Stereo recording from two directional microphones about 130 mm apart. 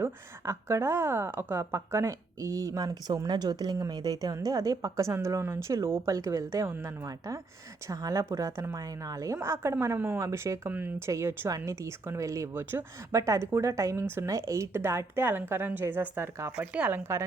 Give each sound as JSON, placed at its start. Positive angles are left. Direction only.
{"t": 0.0, "sound": "a woman's voice", "side_deg": -20}